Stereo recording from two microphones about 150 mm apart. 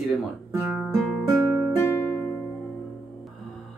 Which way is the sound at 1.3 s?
20° right (ahead or behind).